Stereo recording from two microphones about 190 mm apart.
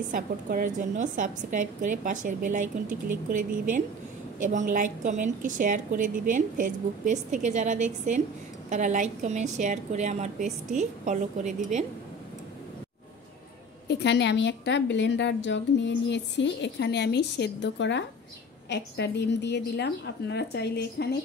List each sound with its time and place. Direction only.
0.1 s a woman's voice: 45° right (ahead or behind)
13.8 s a woman's voice: 65° left (ahead or behind)